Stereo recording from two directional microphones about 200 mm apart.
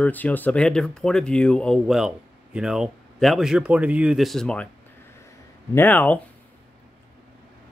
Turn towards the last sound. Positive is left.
turn(degrees=10)  # may be behind; listen again after turning